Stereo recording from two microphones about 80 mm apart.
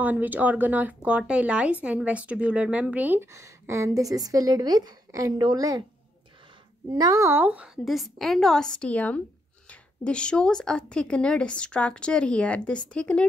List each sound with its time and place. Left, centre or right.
0.0 s speech: right
3.2 s a woman's voice: right
6.9 s speech: right
7.2 s speech: right
7.4 s speech: centre
7.7 s a woman's voice: centre